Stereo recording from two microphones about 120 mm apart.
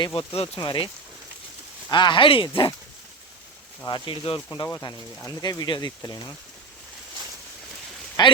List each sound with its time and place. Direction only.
0.2 s speech: 50° left (ahead or behind)
0.6 s speech: 40° left (ahead or behind)
1.9 s speech: 40° left (ahead or behind)
3.8 s speech: 40° left (ahead or behind)
4.5 s speech: 30° left (ahead or behind)
8.2 s speech: 35° left (ahead or behind)